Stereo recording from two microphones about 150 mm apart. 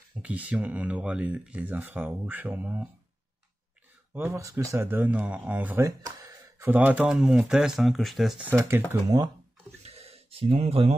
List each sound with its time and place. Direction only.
0.1 s speech: 10° right (ahead or behind)
4.1 s speech: 15° right (ahead or behind)
8.5 s speech: 15° right (ahead or behind)
9.8 s a sound: 45° right (ahead or behind)